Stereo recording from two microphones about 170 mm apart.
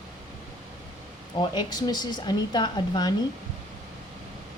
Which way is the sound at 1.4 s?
25° left (ahead or behind).